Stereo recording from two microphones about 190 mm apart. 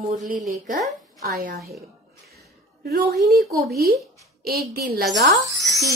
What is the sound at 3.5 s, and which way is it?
A woman's voice, 55° right (ahead or behind).